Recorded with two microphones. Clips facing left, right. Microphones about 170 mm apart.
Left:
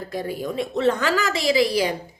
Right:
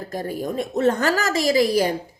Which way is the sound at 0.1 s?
45° right (ahead or behind).